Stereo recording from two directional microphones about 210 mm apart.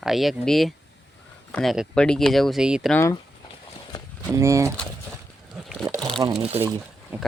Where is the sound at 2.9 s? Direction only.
15° left (ahead or behind).